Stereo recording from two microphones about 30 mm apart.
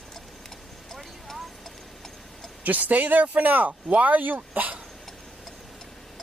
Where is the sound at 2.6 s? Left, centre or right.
Right.